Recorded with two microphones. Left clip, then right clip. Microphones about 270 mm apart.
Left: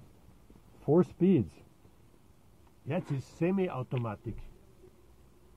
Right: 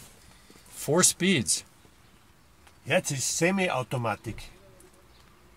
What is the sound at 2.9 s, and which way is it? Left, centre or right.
Speech, centre.